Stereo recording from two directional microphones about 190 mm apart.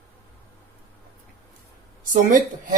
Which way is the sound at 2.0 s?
45° right (ahead or behind).